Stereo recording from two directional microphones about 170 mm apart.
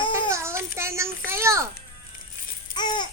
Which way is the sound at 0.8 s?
15° right (ahead or behind).